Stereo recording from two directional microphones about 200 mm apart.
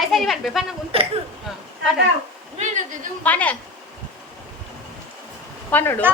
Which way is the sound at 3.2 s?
10° left (ahead or behind).